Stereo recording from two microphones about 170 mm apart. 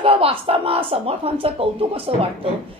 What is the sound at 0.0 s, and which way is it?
A woman's voice, 35° right (ahead or behind).